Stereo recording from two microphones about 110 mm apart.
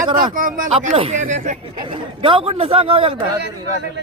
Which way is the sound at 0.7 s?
55° right (ahead or behind).